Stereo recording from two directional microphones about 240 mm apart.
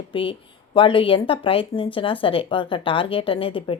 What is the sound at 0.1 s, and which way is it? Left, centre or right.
Speech, left.